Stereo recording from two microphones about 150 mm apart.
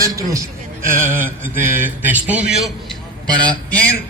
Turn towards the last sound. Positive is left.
turn(degrees=10)  # may be behind; listen again after turning